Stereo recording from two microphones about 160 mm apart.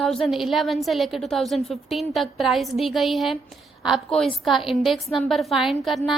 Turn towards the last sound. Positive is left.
turn(degrees=0)  # may be behind; listen again after turning